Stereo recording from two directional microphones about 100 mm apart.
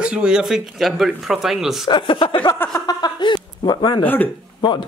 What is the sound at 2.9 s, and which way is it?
A man's voice, 45° left (ahead or behind).